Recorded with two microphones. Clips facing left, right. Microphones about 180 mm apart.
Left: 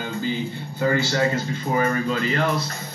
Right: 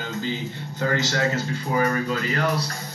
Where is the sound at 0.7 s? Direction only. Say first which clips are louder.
Left 3 dB; 10° left (ahead or behind).